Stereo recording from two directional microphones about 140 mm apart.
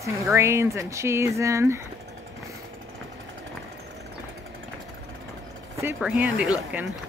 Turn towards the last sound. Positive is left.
turn(degrees=-5)  # may be behind; listen again after turning